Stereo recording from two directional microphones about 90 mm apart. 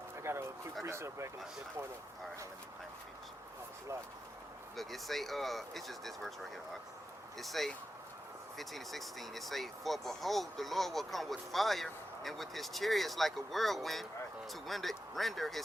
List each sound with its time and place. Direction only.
0.2 s a sound: 30° right (ahead or behind)
0.9 s speech: 30° right (ahead or behind)
4.8 s speech: centre (ahead or behind)